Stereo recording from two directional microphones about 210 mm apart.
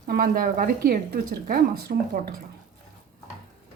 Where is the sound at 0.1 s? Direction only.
45° right (ahead or behind).